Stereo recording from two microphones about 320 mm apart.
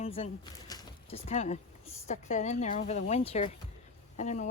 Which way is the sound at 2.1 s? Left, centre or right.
Left.